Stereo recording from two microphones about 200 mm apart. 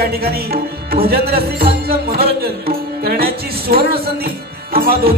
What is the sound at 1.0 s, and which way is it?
Speech, 50° right (ahead or behind).